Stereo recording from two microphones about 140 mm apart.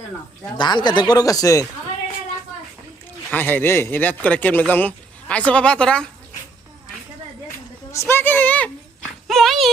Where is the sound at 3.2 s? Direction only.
15° left (ahead or behind).